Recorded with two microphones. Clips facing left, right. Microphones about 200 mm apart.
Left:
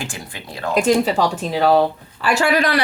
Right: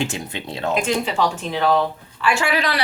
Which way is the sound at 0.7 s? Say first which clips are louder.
Left 6 dB; 40° left (ahead or behind).